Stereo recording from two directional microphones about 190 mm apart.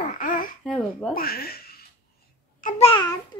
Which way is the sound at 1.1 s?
50° left (ahead or behind).